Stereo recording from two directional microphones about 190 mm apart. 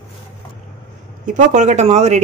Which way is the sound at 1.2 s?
40° right (ahead or behind).